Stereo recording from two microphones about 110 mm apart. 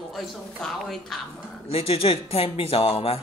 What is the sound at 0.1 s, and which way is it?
A woman's voice, centre (ahead or behind).